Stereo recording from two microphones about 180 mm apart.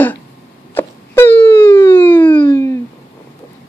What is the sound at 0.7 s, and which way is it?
Wail, 10° left (ahead or behind).